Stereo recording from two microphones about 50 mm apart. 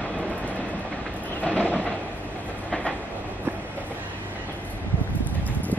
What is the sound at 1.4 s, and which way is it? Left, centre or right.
Train, left.